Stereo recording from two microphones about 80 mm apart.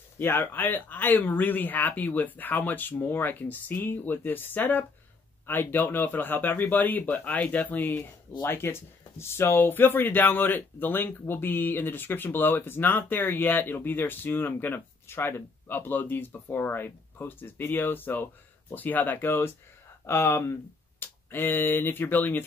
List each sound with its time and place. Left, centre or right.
0.2 s speech: left